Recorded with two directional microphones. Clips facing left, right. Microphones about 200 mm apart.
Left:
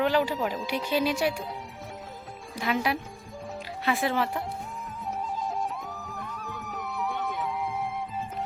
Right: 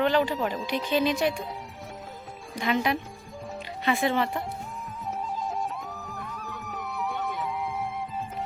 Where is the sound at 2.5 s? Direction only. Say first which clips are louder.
Right 2 dB; 5° left (ahead or behind).